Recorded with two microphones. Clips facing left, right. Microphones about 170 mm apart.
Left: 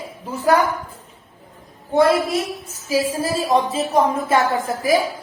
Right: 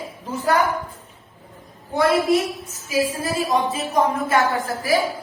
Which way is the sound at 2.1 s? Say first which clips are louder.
Right 2 dB; centre (ahead or behind).